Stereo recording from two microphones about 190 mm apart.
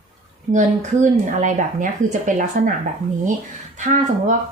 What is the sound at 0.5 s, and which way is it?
Speech, 40° right (ahead or behind).